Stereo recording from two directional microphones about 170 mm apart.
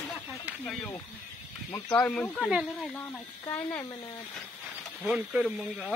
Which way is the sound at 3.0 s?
10° left (ahead or behind).